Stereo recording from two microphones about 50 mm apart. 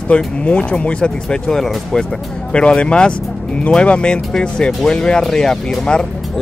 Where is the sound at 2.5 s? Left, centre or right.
Left.